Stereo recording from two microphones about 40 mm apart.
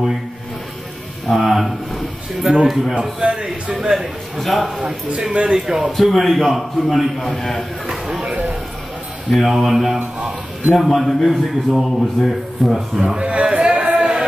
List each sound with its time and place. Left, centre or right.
1.3 s a man's voice: centre
2.4 s a man's voice: centre
4.4 s a man's voice: centre
5.3 s a man's voice: right
5.9 s a man's voice: centre
7.9 s a sound: centre
8.3 s a sound: right
9.3 s a man's voice: centre
12.9 s a man's voice: centre
13.2 s a sound: right